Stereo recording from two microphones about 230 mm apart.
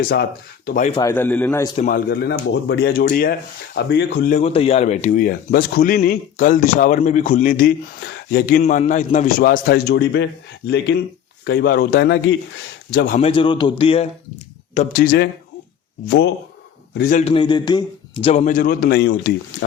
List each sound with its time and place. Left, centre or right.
0.0 s speech: left
0.9 s a man's voice: left
1.1 s a man's voice: centre
1.7 s a man's voice: left
13.1 s a man's voice: left
14.8 s speech: left
17.0 s speech: left